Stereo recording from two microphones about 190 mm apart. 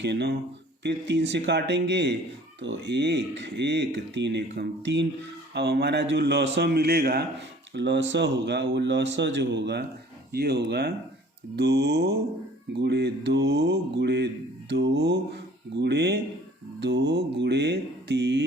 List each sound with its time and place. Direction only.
0.0 s speech: 60° right (ahead or behind)